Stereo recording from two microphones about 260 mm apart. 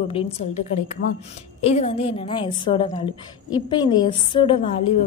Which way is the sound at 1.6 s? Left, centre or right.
Left.